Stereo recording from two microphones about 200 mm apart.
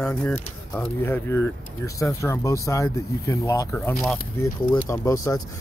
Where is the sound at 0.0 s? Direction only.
10° left (ahead or behind).